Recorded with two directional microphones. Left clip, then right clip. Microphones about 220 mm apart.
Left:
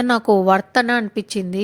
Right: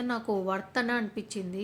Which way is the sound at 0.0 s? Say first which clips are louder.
Left 15 dB; 40° left (ahead or behind).